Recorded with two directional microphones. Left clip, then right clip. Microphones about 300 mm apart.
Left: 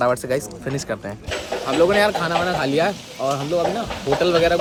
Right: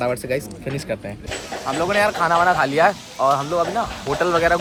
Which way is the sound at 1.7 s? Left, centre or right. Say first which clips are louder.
Left 2 dB; centre.